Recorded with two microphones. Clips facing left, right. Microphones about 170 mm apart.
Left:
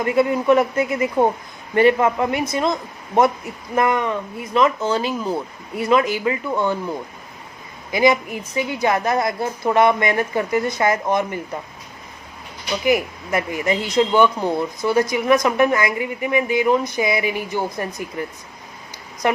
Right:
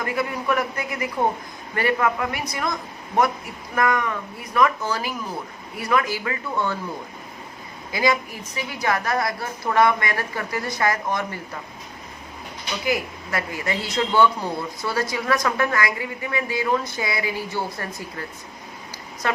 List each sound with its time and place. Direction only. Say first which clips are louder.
0.0 s a woman's voice: left 8 dB; 25° left (ahead or behind)
7.9 s a woman's voice: left 5 dB; 20° left (ahead or behind)
12.8 s a woman's voice: left 6 dB; 20° left (ahead or behind)